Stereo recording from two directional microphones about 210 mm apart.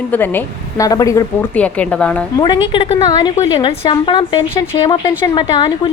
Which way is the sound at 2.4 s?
20° left (ahead or behind).